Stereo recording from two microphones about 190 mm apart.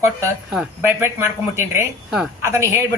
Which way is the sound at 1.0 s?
15° right (ahead or behind).